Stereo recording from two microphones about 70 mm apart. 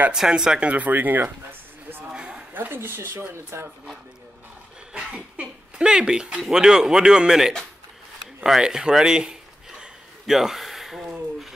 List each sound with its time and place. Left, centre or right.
0.1 s speech: centre; by 2.0 s right
2.1 s a sound: centre
2.5 s speech: right
4.9 s dog: centre
6.4 s speech: centre
8.5 s a sound: centre